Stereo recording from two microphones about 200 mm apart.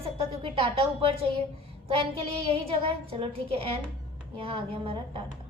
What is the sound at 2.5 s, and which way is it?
A woman's voice, 30° right (ahead or behind).